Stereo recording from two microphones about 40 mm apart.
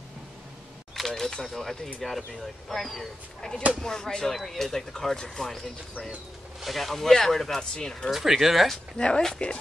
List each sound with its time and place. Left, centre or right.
0.9 s speech: centre
3.3 s speech: centre
6.6 s speech: centre
8.1 s speech: centre
8.9 s speech: left